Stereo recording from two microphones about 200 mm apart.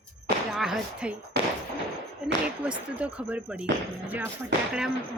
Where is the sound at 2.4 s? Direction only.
5° right (ahead or behind).